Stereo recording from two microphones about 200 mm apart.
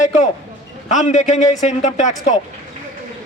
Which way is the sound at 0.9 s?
35° left (ahead or behind).